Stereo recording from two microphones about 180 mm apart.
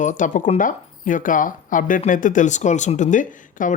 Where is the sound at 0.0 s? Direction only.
45° left (ahead or behind).